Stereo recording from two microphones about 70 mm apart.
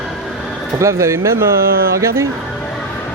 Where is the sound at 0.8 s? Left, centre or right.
Right.